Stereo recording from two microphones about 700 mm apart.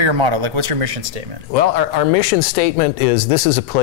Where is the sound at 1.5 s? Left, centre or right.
Left.